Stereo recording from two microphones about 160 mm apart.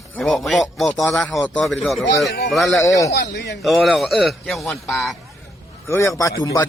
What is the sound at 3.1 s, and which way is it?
Speech, 90° left.